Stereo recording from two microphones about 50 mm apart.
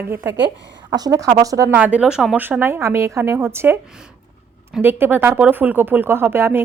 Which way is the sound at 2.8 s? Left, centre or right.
Right.